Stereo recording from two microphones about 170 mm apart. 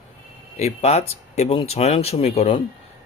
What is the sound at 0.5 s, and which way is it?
Speech, 40° left (ahead or behind).